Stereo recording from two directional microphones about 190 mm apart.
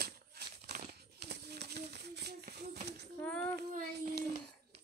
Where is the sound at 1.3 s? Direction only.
60° right (ahead or behind).